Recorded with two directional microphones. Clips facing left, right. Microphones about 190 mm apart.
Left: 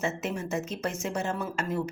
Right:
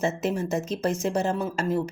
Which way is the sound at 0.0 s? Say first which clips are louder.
Right 5 dB; 35° right (ahead or behind).